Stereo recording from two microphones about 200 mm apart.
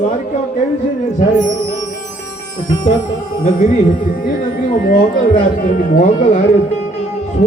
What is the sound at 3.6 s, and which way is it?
Speech, 40° left (ahead or behind).